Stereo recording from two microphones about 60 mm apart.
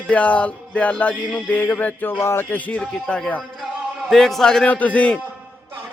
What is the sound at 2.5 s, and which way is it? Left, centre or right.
Speech, left.